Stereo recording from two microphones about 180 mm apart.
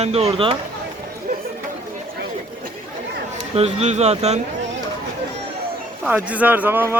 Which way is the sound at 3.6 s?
40° right (ahead or behind).